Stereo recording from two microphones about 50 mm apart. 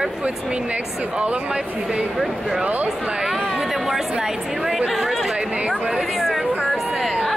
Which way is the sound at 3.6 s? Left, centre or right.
Centre.